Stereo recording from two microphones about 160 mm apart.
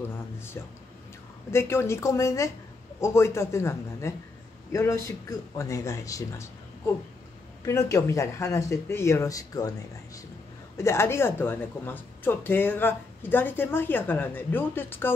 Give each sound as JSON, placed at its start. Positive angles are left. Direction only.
{"t": 1.5, "sound": "a woman's voice", "side_deg": 15}
{"t": 7.6, "sound": "speech", "side_deg": 20}
{"t": 10.8, "sound": "a woman's voice", "side_deg": 15}